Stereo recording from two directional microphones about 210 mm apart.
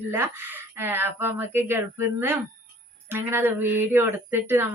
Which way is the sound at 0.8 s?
10° right (ahead or behind).